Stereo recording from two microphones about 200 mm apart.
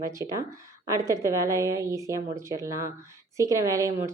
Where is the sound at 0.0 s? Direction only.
15° right (ahead or behind).